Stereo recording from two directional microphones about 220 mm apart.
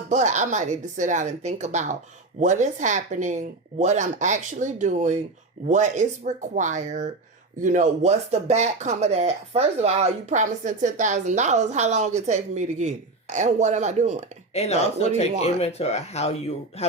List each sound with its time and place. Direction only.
0.1 s speech: 35° right (ahead or behind)
14.5 s speech: 30° left (ahead or behind)